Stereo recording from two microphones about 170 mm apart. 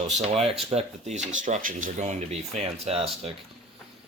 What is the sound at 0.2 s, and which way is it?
Speech, 40° right (ahead or behind).